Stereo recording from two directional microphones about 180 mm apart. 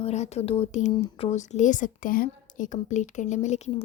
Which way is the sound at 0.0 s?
35° left (ahead or behind).